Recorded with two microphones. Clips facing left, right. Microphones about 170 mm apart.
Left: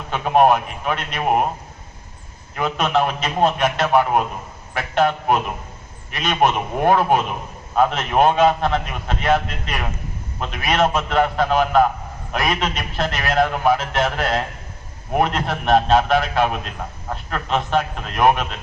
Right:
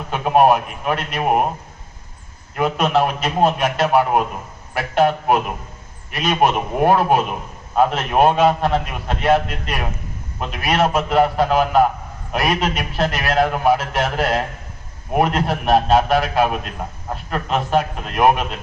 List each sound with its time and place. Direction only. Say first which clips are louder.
0.1 s a man's voice: right 1 dB; 5° right (ahead or behind)
2.6 s a man's voice: right 2 dB; 5° right (ahead or behind)